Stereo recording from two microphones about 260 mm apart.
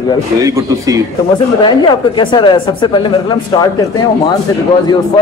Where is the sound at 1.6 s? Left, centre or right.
Centre.